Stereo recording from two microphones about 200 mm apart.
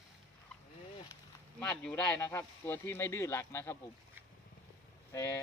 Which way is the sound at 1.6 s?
5° left (ahead or behind).